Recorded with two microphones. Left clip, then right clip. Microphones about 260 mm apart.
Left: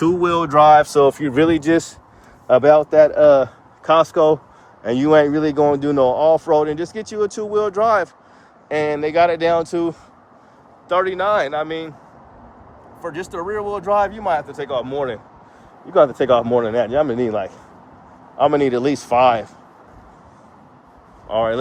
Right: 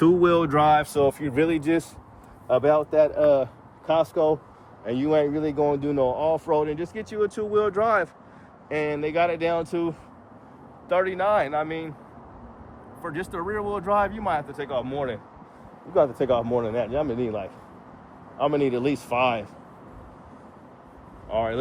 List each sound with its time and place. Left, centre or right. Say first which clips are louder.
0.0 s speech: left 2 dB; centre
13.0 s speech: left 4 dB; centre
16.0 s speech: left 8 dB; left
21.2 s speech: left 7 dB; left